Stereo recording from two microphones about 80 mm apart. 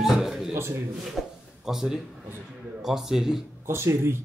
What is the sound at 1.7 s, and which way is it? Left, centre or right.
Speech, centre.